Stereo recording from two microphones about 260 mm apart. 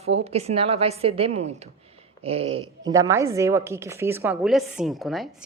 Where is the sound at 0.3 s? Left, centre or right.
Right.